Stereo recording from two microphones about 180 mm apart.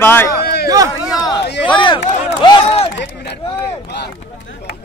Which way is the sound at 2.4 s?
30° left (ahead or behind).